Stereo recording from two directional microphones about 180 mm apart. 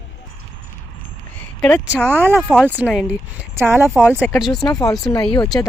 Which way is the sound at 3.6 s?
15° right (ahead or behind).